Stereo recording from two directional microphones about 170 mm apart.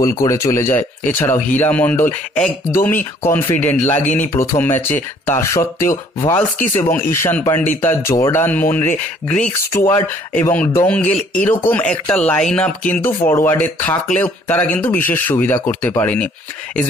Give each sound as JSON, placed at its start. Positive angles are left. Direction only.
{"t": 0.2, "sound": "a man's voice", "side_deg": 15}